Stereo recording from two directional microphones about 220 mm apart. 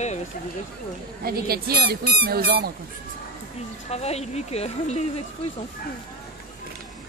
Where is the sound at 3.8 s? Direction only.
30° left (ahead or behind).